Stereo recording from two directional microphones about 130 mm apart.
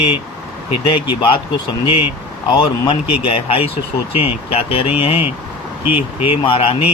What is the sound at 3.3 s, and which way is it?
Speech, 50° left (ahead or behind).